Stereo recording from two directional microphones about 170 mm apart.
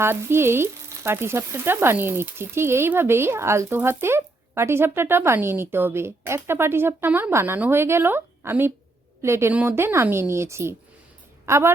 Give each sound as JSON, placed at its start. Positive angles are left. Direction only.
{"t": 0.0, "sound": "a woman's voice", "side_deg": -15}